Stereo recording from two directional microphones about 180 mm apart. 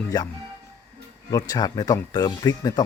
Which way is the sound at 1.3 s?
20° left (ahead or behind).